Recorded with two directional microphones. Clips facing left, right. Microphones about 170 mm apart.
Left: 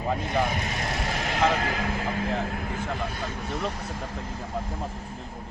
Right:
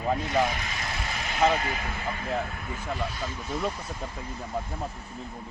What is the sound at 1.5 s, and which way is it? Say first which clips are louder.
Speech: left 3 dB; 90° left.